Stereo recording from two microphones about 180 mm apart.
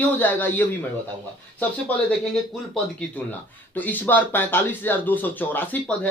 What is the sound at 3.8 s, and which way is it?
A man's voice, 10° left (ahead or behind).